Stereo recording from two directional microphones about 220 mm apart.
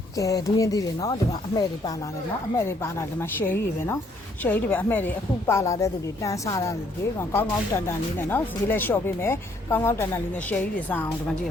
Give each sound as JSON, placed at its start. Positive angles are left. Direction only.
{"t": 0.2, "sound": "speech", "side_deg": 15}